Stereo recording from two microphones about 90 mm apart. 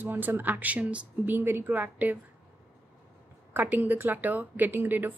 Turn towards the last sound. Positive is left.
turn(degrees=-20)  # may be behind; listen again after turning